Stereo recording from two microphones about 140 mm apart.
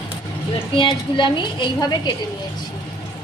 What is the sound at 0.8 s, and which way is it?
A woman's voice, 35° left (ahead or behind).